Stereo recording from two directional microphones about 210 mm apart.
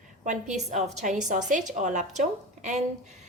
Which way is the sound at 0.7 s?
35° right (ahead or behind).